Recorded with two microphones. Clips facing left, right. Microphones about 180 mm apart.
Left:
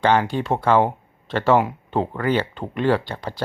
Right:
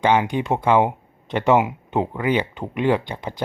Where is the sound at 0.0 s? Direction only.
15° right (ahead or behind).